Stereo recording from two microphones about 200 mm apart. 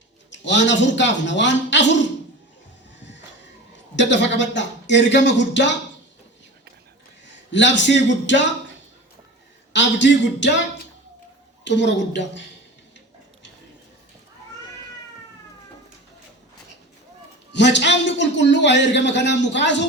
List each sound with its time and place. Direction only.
0.3 s a man's voice: 65° left (ahead or behind)
3.9 s a man's voice: 60° left (ahead or behind)
7.3 s a man's voice: 65° left (ahead or behind)
9.7 s a man's voice: 65° left (ahead or behind)
17.5 s a man's voice: 60° left (ahead or behind)